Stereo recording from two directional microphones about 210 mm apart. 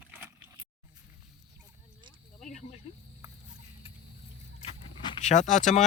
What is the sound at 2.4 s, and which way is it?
Snake, 35° left (ahead or behind).